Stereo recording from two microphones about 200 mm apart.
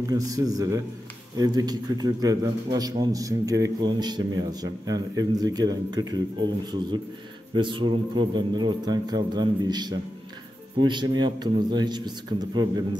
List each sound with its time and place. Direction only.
0.1 s a man's voice: 15° right (ahead or behind)